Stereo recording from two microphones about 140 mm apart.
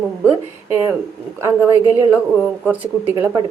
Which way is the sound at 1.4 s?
15° right (ahead or behind).